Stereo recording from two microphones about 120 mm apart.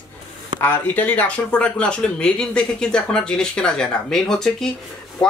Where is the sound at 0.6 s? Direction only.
15° left (ahead or behind).